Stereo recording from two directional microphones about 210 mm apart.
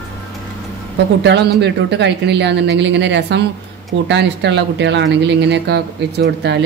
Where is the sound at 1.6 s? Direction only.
55° right (ahead or behind).